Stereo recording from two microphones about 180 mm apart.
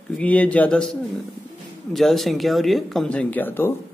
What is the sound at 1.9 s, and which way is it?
A man's voice, centre (ahead or behind).